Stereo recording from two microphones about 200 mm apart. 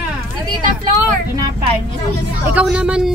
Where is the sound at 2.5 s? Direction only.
5° right (ahead or behind).